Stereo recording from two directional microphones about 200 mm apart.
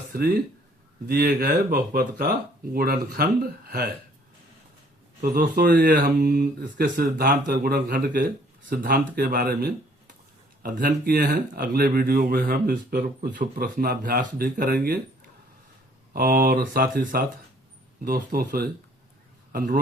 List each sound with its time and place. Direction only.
0.1 s speech: 50° right (ahead or behind)
5.2 s speech: 45° right (ahead or behind)
16.1 s speech: 50° right (ahead or behind)